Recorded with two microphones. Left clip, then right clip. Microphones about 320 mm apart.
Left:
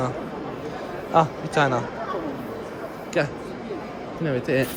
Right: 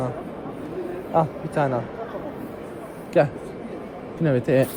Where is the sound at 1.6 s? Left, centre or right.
Centre.